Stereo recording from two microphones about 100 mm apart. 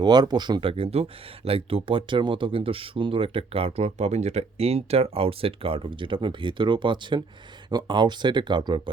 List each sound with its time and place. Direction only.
0.0 s speech: 45° right (ahead or behind)
0.6 s speech: 70° right (ahead or behind); by 8.8 s 50° right (ahead or behind)